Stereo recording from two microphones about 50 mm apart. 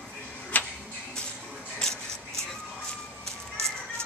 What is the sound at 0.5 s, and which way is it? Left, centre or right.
Tick-tock, left.